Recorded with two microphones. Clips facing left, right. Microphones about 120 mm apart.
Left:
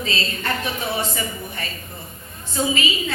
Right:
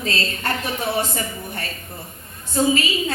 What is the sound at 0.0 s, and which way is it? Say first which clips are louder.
Speech: right 1 dB; 50° right (ahead or behind).